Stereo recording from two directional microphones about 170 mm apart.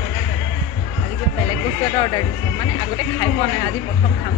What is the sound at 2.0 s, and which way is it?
Speech, 25° left (ahead or behind).